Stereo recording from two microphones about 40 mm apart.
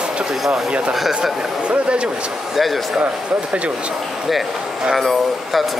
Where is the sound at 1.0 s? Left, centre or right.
Centre.